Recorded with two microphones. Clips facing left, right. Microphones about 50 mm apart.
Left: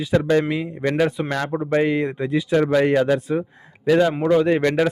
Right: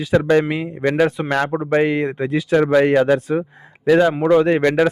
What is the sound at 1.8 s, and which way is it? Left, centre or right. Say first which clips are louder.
Speech: right 1 dB; right.